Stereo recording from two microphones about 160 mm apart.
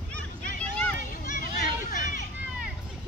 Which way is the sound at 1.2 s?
55° left (ahead or behind).